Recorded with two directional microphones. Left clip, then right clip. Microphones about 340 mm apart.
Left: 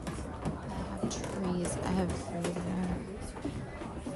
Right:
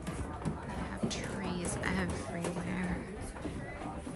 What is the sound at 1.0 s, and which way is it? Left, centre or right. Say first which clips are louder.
Music: left 2 dB; centre.